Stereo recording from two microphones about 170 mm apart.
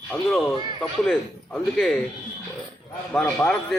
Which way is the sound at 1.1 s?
Centre (ahead or behind).